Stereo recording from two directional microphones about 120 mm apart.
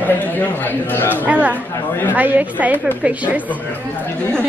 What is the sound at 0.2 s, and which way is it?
Speech, 15° left (ahead or behind).